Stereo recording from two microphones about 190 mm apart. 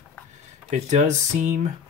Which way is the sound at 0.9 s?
40° right (ahead or behind).